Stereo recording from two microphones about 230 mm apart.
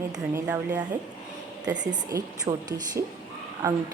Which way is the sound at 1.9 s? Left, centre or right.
Centre.